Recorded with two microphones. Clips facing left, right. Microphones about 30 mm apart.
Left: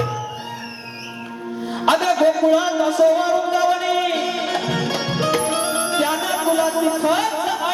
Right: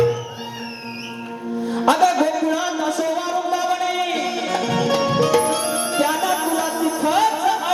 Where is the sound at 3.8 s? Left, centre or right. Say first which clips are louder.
Left 2 dB; left.